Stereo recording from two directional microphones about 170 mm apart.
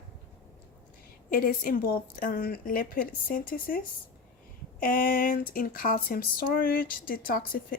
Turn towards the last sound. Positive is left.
turn(degrees=60)  # may be behind; listen again after turning